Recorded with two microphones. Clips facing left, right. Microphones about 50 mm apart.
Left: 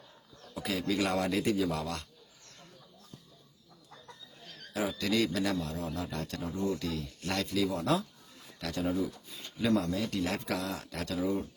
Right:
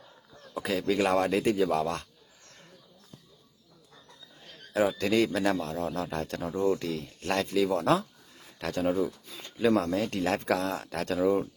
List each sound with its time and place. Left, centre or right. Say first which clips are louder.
0.5 s a man's voice: right 4 dB; right
4.9 s a man's voice: right 4 dB; right
9.7 s speech: right 3 dB; right